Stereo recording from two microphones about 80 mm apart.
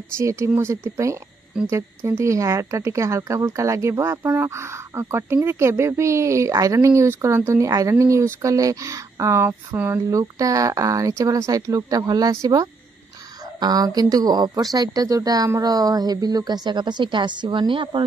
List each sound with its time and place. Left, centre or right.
0.2 s speech: right
1.5 s speech: centre
2.0 s speech: right
10.0 s a woman's voice: right